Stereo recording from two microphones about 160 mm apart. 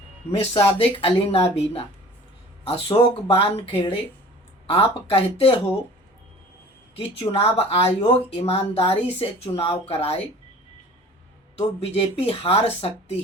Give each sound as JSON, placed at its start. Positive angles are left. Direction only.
{"t": 0.3, "sound": "speech", "side_deg": 35}
{"t": 7.2, "sound": "speech", "side_deg": 35}
{"t": 11.6, "sound": "speech", "side_deg": 35}